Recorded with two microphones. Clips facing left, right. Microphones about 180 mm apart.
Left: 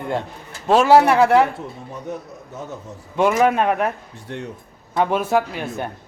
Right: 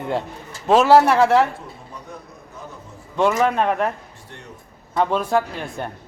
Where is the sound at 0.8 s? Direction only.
Centre (ahead or behind).